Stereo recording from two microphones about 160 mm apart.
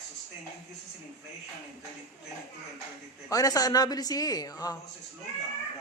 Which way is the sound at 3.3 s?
20° left (ahead or behind).